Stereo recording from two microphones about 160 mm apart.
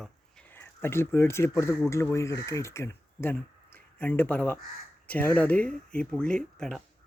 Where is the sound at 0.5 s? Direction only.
15° left (ahead or behind).